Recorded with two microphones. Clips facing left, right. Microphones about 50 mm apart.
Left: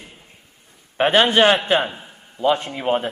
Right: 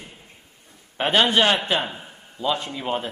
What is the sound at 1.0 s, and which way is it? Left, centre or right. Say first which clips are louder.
Speech: left 4 dB; centre.